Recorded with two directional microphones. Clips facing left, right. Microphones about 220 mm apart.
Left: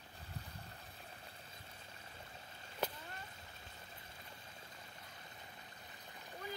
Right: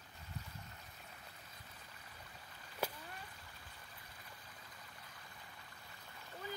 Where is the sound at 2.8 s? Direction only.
10° right (ahead or behind).